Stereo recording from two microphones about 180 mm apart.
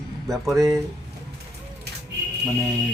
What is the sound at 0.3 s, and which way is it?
Speech, centre (ahead or behind).